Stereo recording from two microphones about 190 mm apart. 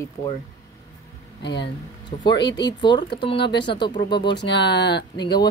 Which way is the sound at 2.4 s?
20° left (ahead or behind).